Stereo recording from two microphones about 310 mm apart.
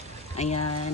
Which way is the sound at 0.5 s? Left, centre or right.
Left.